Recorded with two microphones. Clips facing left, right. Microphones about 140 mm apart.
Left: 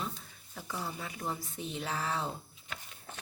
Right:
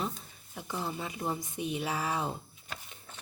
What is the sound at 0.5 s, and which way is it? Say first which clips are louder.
A woman's voice: right 3 dB; 20° right (ahead or behind).